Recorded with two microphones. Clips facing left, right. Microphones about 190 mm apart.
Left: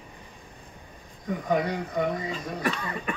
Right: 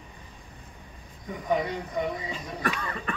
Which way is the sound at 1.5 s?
50° left (ahead or behind).